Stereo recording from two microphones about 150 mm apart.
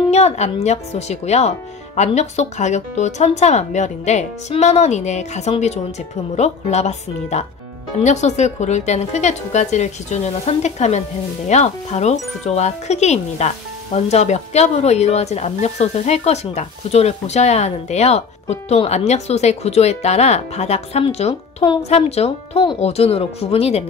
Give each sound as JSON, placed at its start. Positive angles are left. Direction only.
{"t": 0.1, "sound": "speech", "side_deg": 45}